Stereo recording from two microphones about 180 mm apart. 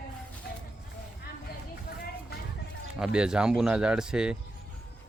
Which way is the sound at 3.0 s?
5° right (ahead or behind).